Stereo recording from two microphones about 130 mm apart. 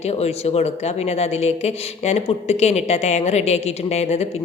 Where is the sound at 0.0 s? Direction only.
55° left (ahead or behind).